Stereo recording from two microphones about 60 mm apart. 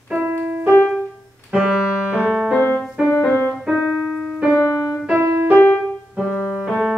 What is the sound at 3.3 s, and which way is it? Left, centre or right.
Keyboard, left.